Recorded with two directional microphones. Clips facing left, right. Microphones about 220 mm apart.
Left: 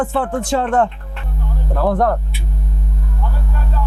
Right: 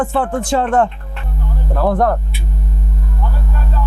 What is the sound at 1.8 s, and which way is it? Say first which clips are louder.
Speech: right 1 dB; 30° right (ahead or behind).